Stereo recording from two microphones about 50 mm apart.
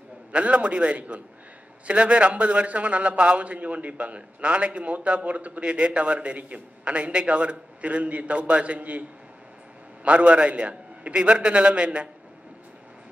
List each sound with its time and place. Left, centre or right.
0.3 s a man's voice: right
10.0 s a man's voice: right